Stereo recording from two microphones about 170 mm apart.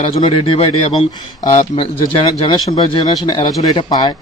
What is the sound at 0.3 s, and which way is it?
A man's voice, 30° left (ahead or behind).